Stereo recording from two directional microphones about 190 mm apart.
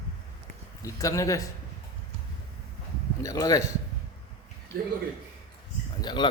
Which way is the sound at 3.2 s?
20° left (ahead or behind).